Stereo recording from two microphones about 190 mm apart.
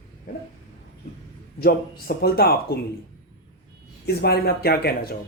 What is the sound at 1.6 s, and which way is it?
Speech, 55° left (ahead or behind).